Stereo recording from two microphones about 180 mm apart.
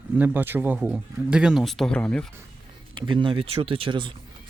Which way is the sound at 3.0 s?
25° right (ahead or behind).